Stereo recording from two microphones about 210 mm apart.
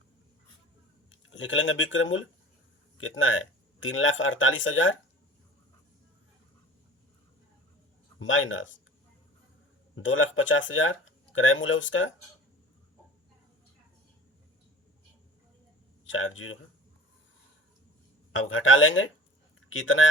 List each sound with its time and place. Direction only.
1.1 s speech: 65° left (ahead or behind)
8.2 s speech: 65° left (ahead or behind)
9.9 s speech: 65° left (ahead or behind)
16.0 s speech: 70° left (ahead or behind)
18.3 s speech: 70° left (ahead or behind)